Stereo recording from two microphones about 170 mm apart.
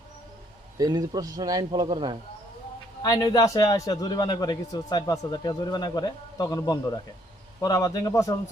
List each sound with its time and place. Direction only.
0.8 s a man's voice: 25° right (ahead or behind)
3.0 s a man's voice: 20° left (ahead or behind)